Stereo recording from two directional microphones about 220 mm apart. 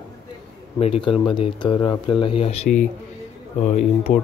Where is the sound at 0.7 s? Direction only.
25° left (ahead or behind).